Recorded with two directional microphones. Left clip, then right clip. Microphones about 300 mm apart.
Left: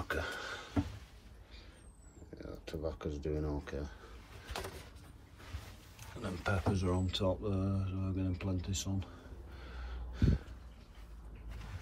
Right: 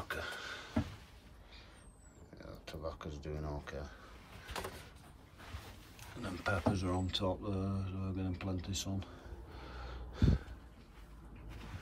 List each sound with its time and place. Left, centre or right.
0.1 s a sound: centre
2.3 s speech: centre
5.9 s speech: centre
9.6 s snort: centre